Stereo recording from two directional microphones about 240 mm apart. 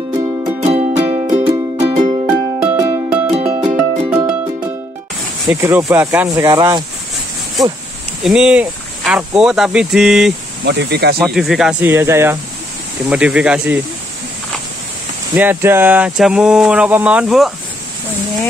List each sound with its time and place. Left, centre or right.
0.7 s music: right
2.2 s music: centre
5.5 s speech: centre
8.2 s speech: centre
10.6 s speech: right
11.1 s speech: centre
15.3 s speech: centre